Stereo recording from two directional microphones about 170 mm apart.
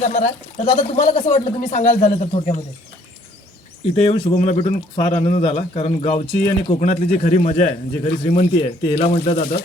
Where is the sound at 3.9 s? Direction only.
35° left (ahead or behind).